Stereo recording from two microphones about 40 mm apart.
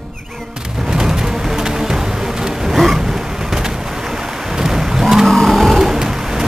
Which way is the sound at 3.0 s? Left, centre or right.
Centre.